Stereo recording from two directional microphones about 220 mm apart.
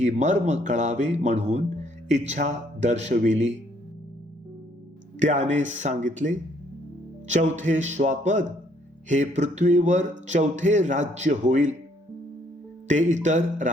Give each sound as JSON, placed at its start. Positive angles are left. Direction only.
{"t": 0.0, "sound": "speech", "side_deg": -30}
{"t": 5.2, "sound": "speech", "side_deg": -35}
{"t": 12.9, "sound": "speech", "side_deg": -35}